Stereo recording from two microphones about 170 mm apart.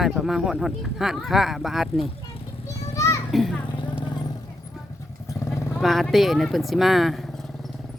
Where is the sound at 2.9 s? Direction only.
15° left (ahead or behind).